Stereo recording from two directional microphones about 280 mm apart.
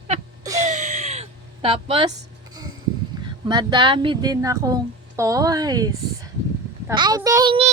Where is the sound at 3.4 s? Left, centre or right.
Centre.